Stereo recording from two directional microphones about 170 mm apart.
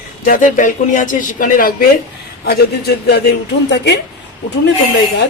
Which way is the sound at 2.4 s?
70° left (ahead or behind).